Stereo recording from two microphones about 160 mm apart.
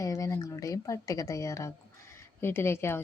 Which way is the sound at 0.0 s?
20° left (ahead or behind).